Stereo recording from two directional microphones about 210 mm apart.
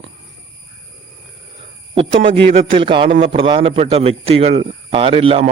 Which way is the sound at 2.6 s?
25° right (ahead or behind).